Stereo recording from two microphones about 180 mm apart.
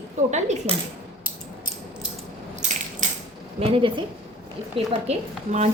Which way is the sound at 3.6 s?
30° right (ahead or behind).